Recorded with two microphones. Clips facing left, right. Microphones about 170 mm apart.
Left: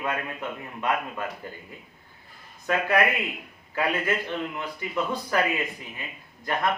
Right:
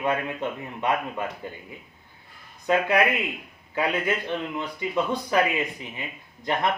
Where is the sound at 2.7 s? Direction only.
20° right (ahead or behind).